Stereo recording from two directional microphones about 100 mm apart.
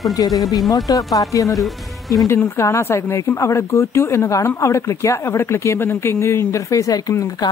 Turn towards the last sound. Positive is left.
turn(degrees=35)  # may be behind; listen again after turning